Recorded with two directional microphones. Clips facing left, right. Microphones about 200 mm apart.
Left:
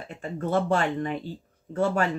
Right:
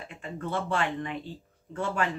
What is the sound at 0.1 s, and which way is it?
Speech, 40° left (ahead or behind).